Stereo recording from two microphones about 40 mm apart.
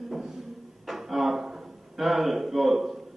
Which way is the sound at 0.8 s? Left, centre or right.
Centre.